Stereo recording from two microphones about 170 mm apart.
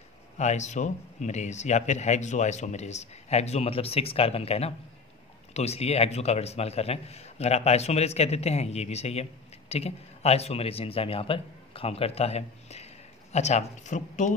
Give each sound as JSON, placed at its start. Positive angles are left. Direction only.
{"t": 0.4, "sound": "a man's voice", "side_deg": 45}